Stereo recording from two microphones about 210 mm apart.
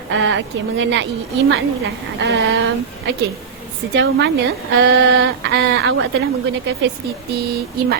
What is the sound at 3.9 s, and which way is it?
A woman's voice, 55° right (ahead or behind).